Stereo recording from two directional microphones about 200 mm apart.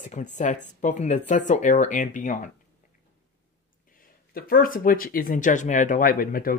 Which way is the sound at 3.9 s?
45° left (ahead or behind).